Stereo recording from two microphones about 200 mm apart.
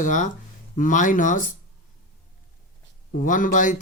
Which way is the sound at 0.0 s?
40° left (ahead or behind).